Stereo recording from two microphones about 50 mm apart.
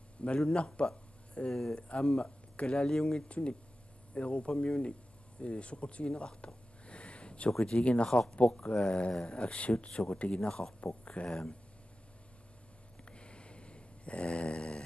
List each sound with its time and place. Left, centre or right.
0.2 s a man's voice: left
0.8 s a sound: centre
1.5 s speech: centre
1.8 s speech: left
3.3 s speech: left
8.1 s speech: centre
13.1 s snoring: left